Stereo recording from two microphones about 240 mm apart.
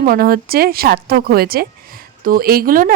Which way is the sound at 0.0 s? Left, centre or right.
Right.